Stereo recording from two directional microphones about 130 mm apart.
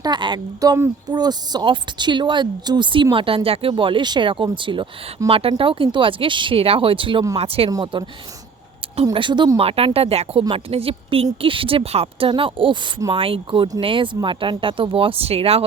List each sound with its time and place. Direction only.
0.0 s a woman's voice: 35° right (ahead or behind)
7.7 s a woman's voice: 35° right (ahead or behind)
9.1 s a woman's voice: 40° right (ahead or behind)
9.6 s a woman's voice: 50° right (ahead or behind)